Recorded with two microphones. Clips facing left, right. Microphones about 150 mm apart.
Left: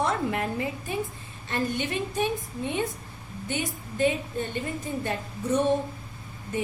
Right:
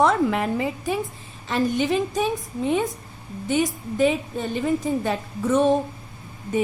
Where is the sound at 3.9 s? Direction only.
90° right.